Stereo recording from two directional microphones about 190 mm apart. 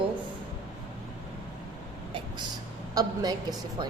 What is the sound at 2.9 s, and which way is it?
Speech, 20° right (ahead or behind).